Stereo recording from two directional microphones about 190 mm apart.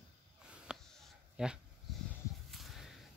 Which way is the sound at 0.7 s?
5° right (ahead or behind).